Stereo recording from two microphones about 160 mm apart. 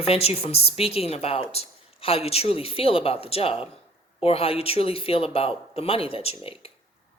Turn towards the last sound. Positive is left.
turn(degrees=40)  # may be behind; listen again after turning